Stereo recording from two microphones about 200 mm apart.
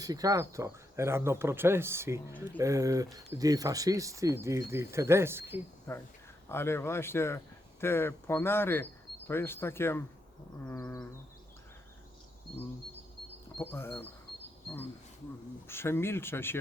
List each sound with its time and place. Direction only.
0.0 s speech: 20° right (ahead or behind)
6.5 s speech: 10° left (ahead or behind)
12.5 s speech: centre (ahead or behind)
15.6 s speech: 10° left (ahead or behind)